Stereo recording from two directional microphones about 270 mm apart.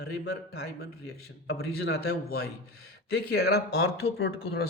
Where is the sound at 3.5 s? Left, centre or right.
Left.